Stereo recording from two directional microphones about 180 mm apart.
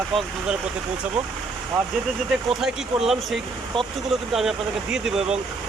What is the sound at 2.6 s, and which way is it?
Speech, centre (ahead or behind).